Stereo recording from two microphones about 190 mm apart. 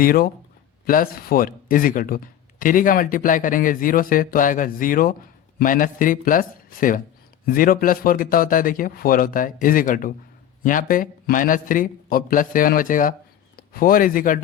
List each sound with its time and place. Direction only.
0.0 s speech: 50° left (ahead or behind)